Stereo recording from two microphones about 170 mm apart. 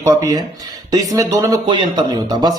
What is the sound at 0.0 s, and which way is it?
A man's voice, 20° right (ahead or behind).